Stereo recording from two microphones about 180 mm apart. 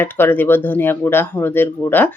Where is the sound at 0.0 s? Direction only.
10° left (ahead or behind).